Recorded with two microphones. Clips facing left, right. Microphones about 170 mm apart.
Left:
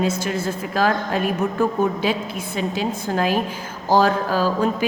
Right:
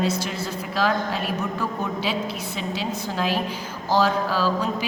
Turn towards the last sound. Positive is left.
turn(degrees=50)  # may be behind; listen again after turning